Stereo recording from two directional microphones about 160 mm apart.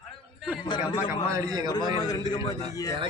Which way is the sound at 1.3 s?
20° right (ahead or behind).